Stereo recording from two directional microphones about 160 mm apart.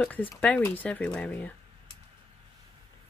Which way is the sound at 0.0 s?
10° left (ahead or behind).